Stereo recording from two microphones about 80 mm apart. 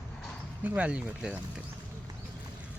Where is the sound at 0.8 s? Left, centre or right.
Centre.